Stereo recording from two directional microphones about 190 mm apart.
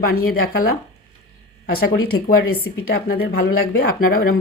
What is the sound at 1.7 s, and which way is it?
Speech, 50° left (ahead or behind).